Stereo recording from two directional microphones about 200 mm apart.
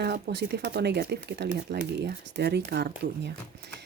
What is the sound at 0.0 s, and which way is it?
Speech, 55° right (ahead or behind).